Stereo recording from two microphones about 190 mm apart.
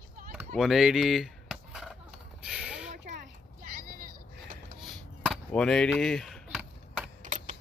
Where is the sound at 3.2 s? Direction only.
50° right (ahead or behind).